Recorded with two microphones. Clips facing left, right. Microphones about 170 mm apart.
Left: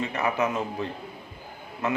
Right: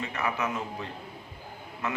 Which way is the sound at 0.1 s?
25° left (ahead or behind).